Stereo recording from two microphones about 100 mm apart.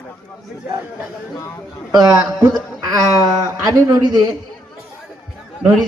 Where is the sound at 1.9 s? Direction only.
40° right (ahead or behind).